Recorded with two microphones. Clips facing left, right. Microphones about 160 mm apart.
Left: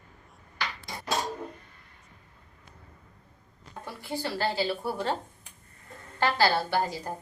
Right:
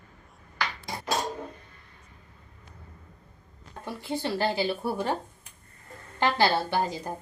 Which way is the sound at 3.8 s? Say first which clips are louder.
Right 3 dB; 20° right (ahead or behind).